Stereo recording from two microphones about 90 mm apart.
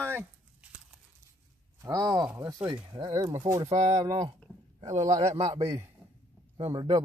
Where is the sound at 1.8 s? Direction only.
40° right (ahead or behind).